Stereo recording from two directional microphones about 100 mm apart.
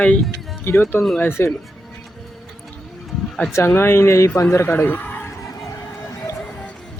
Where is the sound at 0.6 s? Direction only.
25° left (ahead or behind).